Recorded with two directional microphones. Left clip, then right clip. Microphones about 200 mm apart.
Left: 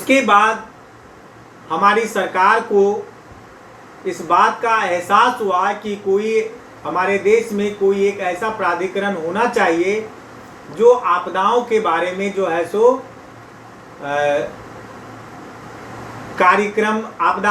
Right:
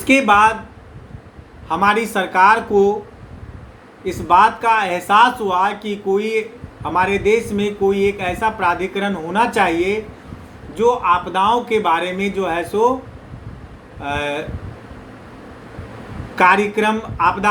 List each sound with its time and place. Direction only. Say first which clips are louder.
0.1 s speech: even; 30° right (ahead or behind)
1.8 s speech: left 2 dB; 30° right (ahead or behind)
4.0 s speech: right 2 dB; 30° right (ahead or behind)
14.0 s speech: left 3 dB; 30° right (ahead or behind)
16.4 s speech: even; 30° right (ahead or behind)